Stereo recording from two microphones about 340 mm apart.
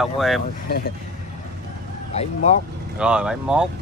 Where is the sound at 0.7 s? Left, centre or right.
Left.